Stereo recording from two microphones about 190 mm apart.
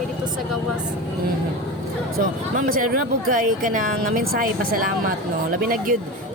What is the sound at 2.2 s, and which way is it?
Speech, 45° right (ahead or behind).